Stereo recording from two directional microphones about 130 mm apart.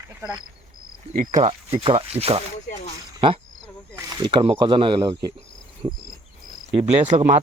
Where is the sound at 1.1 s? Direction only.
80° right.